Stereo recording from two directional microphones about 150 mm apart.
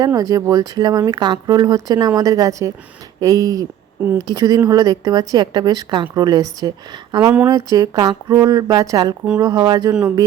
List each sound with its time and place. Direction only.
0.0 s a woman's voice: 25° right (ahead or behind)